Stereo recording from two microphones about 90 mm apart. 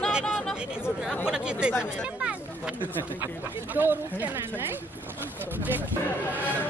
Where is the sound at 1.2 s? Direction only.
10° right (ahead or behind).